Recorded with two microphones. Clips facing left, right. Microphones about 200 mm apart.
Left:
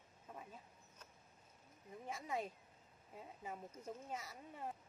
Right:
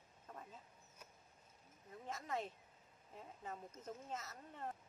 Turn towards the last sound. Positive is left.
turn(degrees=10)  # may be behind; listen again after turning